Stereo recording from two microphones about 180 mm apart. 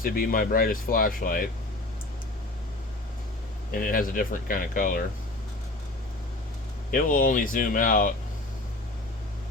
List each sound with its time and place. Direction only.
0.0 s speech: 55° left (ahead or behind)
3.7 s speech: 50° left (ahead or behind)
6.9 s speech: 50° left (ahead or behind)